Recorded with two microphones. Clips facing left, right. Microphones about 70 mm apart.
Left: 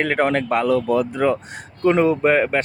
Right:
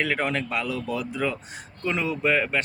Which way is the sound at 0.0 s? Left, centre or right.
Left.